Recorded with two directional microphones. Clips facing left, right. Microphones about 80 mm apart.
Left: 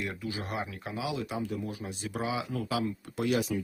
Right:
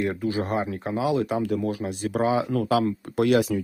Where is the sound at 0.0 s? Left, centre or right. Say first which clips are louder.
Right 10 dB; right.